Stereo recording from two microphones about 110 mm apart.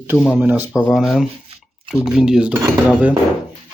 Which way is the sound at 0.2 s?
10° right (ahead or behind).